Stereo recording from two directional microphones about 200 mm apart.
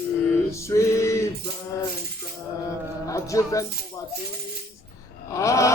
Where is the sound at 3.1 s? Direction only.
15° left (ahead or behind).